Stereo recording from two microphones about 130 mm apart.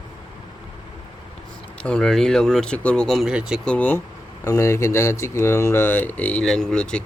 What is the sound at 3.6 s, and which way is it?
Speech, 10° left (ahead or behind).